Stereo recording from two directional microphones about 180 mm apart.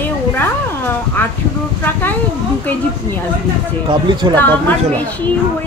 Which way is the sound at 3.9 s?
25° right (ahead or behind).